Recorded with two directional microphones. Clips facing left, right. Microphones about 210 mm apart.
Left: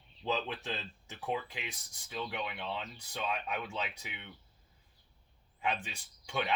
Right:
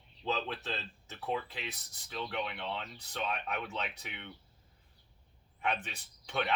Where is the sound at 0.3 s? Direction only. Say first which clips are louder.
Even; 15° left (ahead or behind).